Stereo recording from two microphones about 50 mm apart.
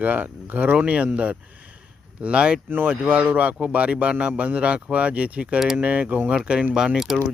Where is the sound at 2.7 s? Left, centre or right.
Right.